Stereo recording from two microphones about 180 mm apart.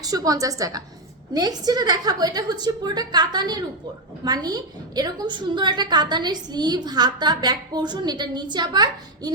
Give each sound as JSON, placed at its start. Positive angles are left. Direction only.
{"t": 0.0, "sound": "a woman's voice", "side_deg": -20}